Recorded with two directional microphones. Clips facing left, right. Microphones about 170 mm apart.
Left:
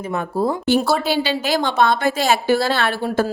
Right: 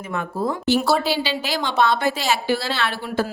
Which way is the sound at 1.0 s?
50° left (ahead or behind).